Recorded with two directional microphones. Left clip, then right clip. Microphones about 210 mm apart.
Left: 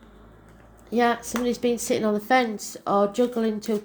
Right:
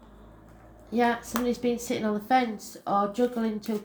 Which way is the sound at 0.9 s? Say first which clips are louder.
Left 3 dB; 40° left (ahead or behind).